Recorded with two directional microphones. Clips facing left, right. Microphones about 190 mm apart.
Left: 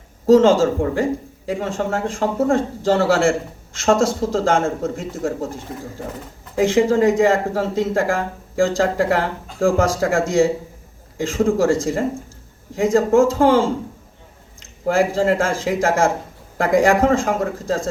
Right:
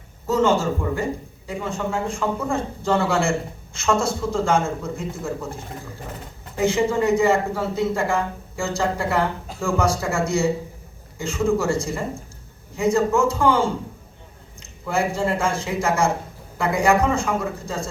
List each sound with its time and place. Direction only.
0.3 s speech: 90° left
6.6 s speech: 90° left